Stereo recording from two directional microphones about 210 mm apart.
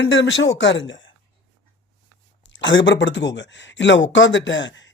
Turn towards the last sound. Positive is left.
turn(degrees=60)  # may be behind; listen again after turning